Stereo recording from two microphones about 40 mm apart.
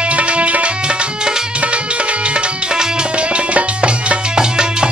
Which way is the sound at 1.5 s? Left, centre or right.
Right.